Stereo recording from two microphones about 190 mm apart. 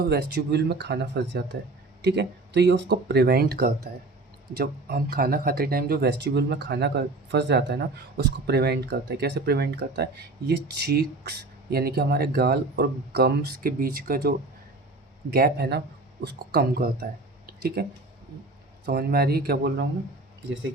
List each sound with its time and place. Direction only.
0.0 s speech: 60° right (ahead or behind)
18.9 s speech: 55° right (ahead or behind)